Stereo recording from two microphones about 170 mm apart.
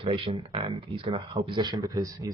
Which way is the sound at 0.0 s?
35° right (ahead or behind).